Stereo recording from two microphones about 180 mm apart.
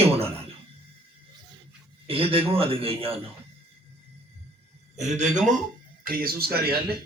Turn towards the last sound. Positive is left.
turn(degrees=-60)  # may be behind; listen again after turning